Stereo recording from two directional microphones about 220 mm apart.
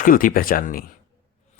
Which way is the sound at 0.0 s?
40° left (ahead or behind).